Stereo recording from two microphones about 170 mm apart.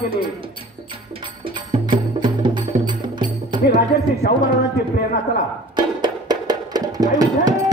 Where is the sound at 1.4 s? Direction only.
25° right (ahead or behind).